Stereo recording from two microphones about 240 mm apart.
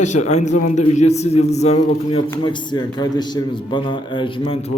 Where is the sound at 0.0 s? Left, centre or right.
Left.